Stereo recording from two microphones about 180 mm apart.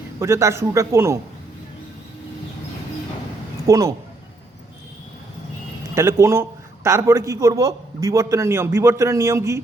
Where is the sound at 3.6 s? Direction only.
20° right (ahead or behind).